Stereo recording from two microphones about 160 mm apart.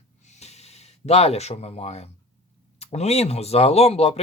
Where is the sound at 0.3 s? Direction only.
45° left (ahead or behind).